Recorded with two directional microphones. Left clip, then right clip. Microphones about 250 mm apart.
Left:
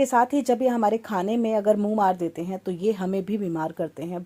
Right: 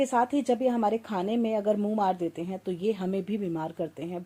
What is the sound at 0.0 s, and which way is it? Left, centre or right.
Speech, left.